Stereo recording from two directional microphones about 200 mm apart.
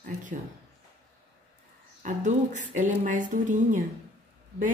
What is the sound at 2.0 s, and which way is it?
A woman's voice, 40° right (ahead or behind).